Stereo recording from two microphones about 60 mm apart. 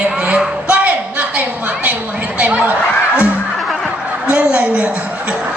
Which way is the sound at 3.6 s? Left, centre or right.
Centre.